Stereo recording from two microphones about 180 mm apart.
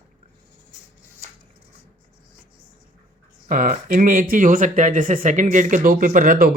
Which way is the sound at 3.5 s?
50° right (ahead or behind).